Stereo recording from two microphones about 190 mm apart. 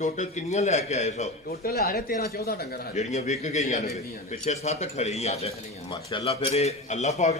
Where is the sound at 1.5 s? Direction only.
55° left (ahead or behind).